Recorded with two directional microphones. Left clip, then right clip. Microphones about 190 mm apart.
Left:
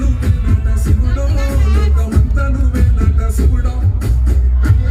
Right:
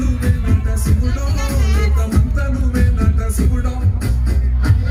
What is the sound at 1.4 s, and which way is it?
Music, 35° right (ahead or behind).